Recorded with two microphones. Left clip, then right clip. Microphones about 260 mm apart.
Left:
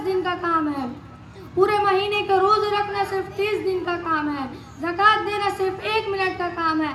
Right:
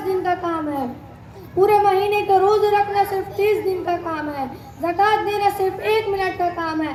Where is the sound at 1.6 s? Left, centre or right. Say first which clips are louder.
Right 4 dB; centre.